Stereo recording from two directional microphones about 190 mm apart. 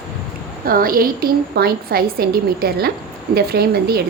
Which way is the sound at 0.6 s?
50° right (ahead or behind).